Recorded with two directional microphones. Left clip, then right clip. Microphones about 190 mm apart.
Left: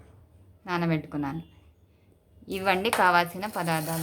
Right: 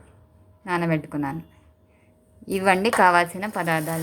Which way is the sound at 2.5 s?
25° right (ahead or behind).